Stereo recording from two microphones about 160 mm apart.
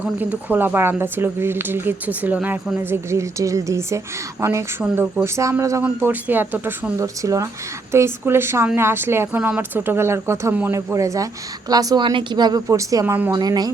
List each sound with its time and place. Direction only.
0.0 s speech: 10° right (ahead or behind)
4.8 s speech: 5° right (ahead or behind)
5.2 s a woman's voice: 20° right (ahead or behind)